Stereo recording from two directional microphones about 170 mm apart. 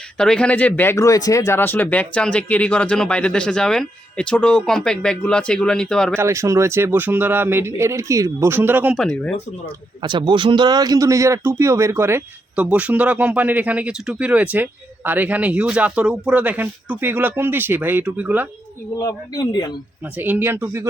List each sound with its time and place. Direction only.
0.2 s speech: 5° left (ahead or behind)
6.1 s speech: 15° right (ahead or behind)
9.0 s speech: 5° left (ahead or behind)
10.0 s speech: 25° right (ahead or behind); by 18.4 s 10° right (ahead or behind)
18.9 s a man's voice: 20° left (ahead or behind)
20.1 s speech: 10° right (ahead or behind)